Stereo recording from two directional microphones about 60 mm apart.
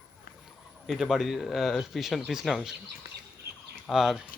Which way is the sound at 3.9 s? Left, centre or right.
Centre.